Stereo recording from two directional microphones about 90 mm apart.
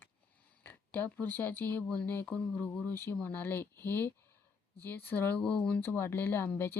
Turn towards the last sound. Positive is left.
turn(degrees=25)  # may be behind; listen again after turning